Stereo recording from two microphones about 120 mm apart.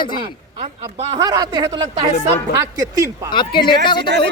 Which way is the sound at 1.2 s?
35° right (ahead or behind).